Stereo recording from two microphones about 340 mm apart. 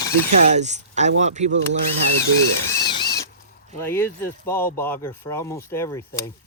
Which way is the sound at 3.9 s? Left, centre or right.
Centre.